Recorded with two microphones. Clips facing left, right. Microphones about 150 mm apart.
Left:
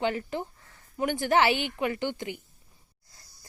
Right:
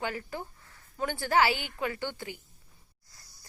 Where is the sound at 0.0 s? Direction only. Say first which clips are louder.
Left 6 dB; 25° left (ahead or behind).